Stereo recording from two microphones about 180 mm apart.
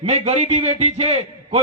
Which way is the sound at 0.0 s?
35° right (ahead or behind).